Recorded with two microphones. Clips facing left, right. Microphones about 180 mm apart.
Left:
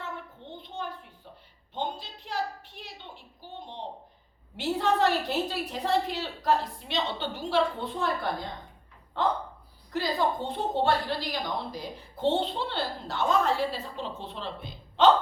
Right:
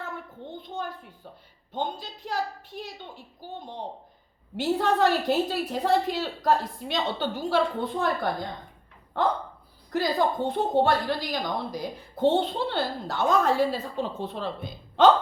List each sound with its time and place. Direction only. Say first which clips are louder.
0.5 s a sound: right 2 dB; 45° right (ahead or behind)
1.7 s a woman's voice: right 2 dB; 40° right (ahead or behind)
9.9 s a woman's voice: right 3 dB; 45° right (ahead or behind)